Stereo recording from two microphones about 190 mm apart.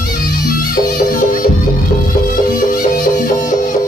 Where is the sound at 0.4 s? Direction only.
50° left (ahead or behind).